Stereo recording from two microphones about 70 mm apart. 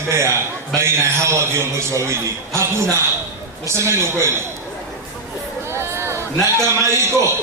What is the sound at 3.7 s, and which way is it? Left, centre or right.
Speech, right.